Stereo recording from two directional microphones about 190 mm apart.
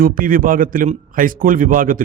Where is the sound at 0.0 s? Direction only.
45° right (ahead or behind).